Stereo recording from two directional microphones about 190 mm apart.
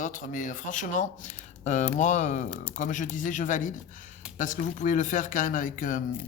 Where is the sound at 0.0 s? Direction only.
40° left (ahead or behind).